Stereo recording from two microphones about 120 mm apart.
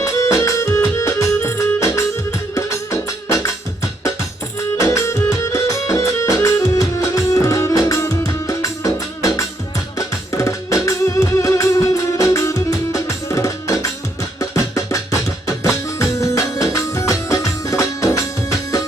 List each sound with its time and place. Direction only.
0.0 s music: 25° left (ahead or behind)
4.8 s music: 25° left (ahead or behind)
16.0 s music: 25° left (ahead or behind)